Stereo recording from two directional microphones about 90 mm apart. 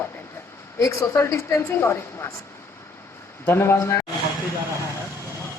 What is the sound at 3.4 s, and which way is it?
Speech, 25° left (ahead or behind).